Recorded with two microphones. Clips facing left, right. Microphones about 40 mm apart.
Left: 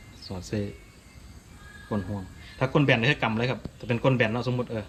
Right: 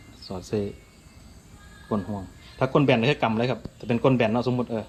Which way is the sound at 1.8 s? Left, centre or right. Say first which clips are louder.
Right 3 dB; centre.